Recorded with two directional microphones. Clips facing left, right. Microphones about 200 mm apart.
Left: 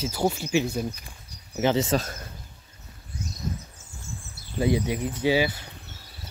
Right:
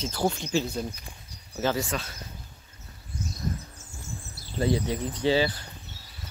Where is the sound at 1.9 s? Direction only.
45° left (ahead or behind).